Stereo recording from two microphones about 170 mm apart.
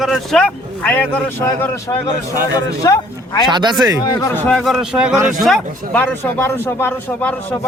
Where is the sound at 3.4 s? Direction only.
25° right (ahead or behind).